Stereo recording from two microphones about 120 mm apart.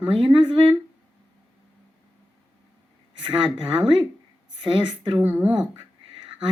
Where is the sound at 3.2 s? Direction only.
45° right (ahead or behind).